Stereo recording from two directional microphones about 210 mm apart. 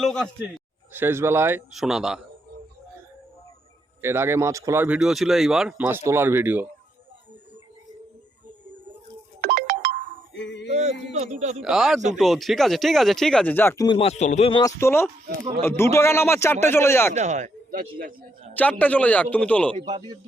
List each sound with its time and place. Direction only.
0.0 s speech: centre (ahead or behind)
0.9 s speech: 10° right (ahead or behind)
4.0 s speech: 10° right (ahead or behind)
9.4 s ringtone: 45° right (ahead or behind)
10.3 s a sound: 55° left (ahead or behind)
10.7 s speech: 30° right (ahead or behind)
11.6 s speech: centre (ahead or behind); by 14.7 s 25° left (ahead or behind)
14.8 s a man's voice: 10° left (ahead or behind)
17.2 s speech: 35° right (ahead or behind)
18.5 s a man's voice: 5° left (ahead or behind)
19.7 s speech: 20° right (ahead or behind)